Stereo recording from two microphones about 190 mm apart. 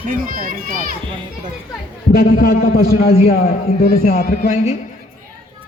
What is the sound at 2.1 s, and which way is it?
A man's voice, 55° left (ahead or behind).